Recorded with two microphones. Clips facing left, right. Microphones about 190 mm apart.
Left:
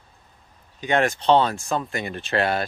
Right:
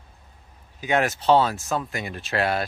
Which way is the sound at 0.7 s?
5° right (ahead or behind).